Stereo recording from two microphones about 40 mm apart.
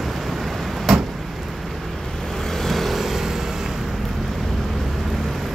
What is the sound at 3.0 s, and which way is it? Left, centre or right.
Vehicle, centre.